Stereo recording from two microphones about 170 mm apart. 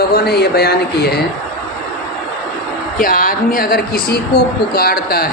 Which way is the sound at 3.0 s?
55° left (ahead or behind).